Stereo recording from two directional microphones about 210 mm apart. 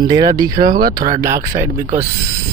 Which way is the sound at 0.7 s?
45° right (ahead or behind).